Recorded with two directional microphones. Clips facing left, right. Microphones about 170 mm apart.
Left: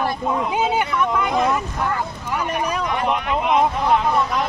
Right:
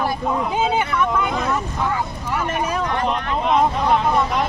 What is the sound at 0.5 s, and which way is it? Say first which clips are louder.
Speech: right 1 dB; centre (ahead or behind).